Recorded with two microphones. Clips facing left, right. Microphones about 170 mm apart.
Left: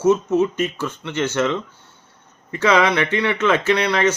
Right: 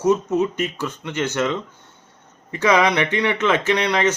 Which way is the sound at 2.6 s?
15° right (ahead or behind).